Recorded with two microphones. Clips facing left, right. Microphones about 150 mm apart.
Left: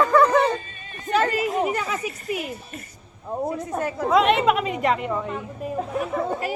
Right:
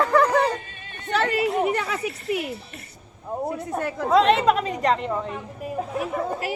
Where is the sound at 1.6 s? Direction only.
65° right (ahead or behind).